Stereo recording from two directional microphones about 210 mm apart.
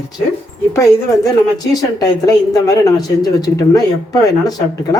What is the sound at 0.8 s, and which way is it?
A woman's voice, 15° left (ahead or behind).